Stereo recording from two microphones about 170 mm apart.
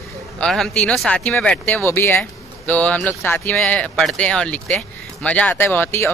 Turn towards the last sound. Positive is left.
turn(degrees=15)  # may be behind; listen again after turning